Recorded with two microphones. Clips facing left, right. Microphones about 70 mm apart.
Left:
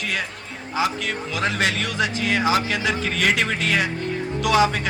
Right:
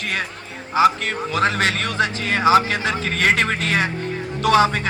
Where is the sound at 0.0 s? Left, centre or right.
Right.